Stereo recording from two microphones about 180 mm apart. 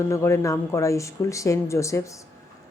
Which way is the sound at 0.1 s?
15° left (ahead or behind).